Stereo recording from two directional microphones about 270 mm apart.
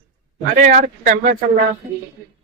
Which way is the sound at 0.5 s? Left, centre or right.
Right.